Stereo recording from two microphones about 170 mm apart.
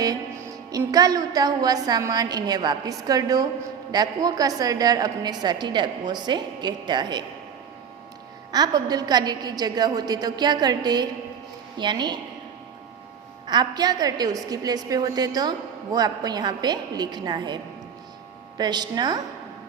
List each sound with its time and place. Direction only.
0.7 s a woman's voice: 20° right (ahead or behind)
8.5 s a woman's voice: 25° right (ahead or behind)
13.5 s a woman's voice: 25° right (ahead or behind)